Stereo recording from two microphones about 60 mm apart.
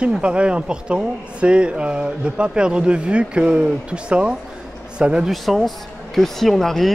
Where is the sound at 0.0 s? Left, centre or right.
Centre.